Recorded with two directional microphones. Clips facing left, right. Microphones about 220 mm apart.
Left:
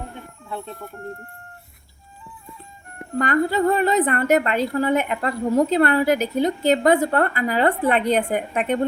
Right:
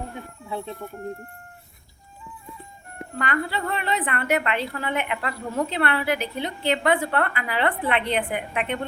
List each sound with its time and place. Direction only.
0.4 s speech: 5° right (ahead or behind)
3.2 s a woman's voice: 45° left (ahead or behind)